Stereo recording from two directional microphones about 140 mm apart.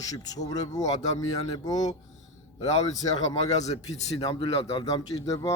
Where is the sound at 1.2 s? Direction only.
25° left (ahead or behind).